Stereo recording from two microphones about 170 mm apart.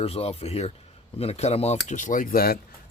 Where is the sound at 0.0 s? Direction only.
35° left (ahead or behind).